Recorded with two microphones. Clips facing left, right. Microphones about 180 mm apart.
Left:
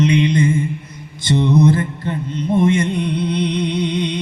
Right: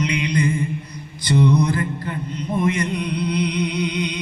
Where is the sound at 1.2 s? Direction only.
25° left (ahead or behind).